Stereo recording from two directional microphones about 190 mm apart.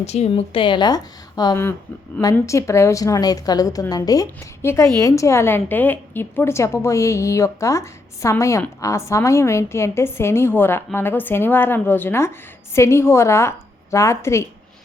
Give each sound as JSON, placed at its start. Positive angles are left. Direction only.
{"t": 0.0, "sound": "a woman's voice", "side_deg": 35}